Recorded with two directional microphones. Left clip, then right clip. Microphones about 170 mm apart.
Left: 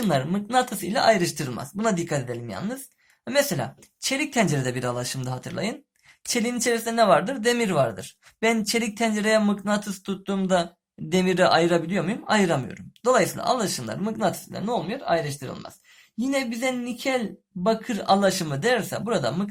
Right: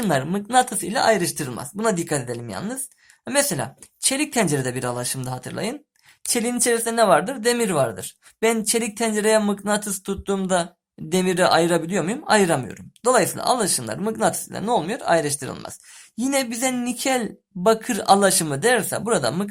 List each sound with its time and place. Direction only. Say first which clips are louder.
0.0 s a woman's voice: right 2 dB; 25° right (ahead or behind)